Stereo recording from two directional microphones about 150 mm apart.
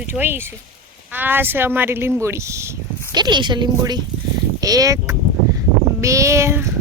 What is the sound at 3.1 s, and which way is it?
Speech, 30° right (ahead or behind).